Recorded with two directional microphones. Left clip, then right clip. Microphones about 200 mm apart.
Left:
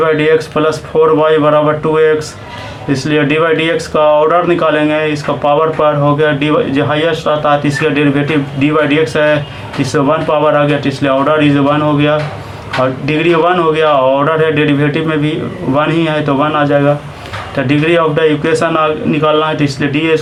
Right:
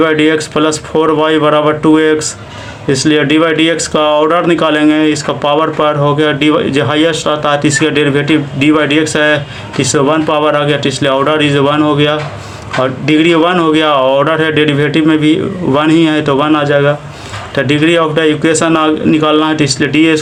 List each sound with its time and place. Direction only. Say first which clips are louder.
0.0 s speech: even; 45° right (ahead or behind)